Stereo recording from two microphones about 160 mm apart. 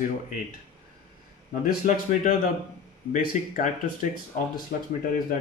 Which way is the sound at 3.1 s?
55° left (ahead or behind).